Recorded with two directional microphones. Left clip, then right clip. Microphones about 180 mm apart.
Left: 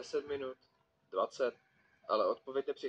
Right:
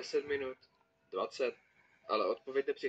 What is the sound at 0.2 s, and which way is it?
Speech, 20° right (ahead or behind).